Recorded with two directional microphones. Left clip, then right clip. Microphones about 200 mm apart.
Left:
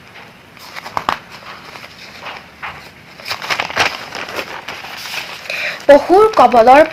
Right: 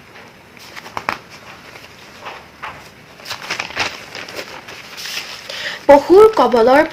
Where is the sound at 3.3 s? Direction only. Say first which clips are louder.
Left 5 dB; 40° left (ahead or behind).